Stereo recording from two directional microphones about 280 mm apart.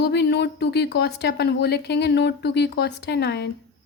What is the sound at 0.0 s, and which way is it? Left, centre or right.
A woman's voice, left.